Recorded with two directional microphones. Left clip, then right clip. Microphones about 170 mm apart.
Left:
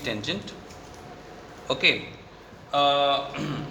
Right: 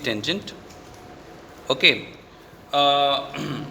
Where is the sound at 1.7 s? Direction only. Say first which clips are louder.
Right 4 dB; 45° right (ahead or behind).